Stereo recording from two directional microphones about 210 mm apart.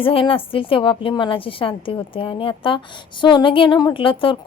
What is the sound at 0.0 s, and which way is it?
A woman's voice, 25° left (ahead or behind).